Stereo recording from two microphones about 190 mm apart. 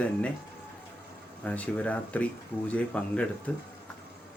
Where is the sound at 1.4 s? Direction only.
5° left (ahead or behind).